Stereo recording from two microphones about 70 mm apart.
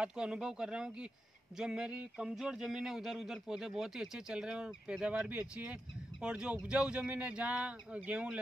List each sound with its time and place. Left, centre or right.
0.0 s speech: centre